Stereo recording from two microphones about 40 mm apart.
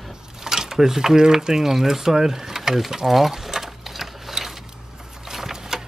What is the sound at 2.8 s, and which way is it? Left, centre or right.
Sewing machine, centre.